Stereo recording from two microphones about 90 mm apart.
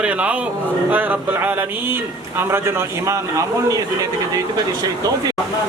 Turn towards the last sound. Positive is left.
turn(degrees=-40)  # may be behind; listen again after turning